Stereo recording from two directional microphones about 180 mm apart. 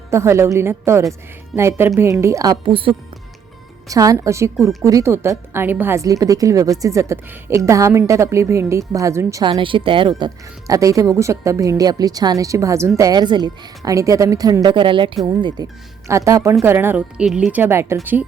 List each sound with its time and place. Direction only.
0.1 s a woman's voice: 15° right (ahead or behind)
3.8 s a woman's voice: 20° right (ahead or behind)